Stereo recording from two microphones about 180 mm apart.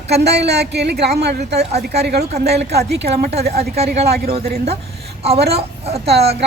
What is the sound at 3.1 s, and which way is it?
Speech, 35° right (ahead or behind).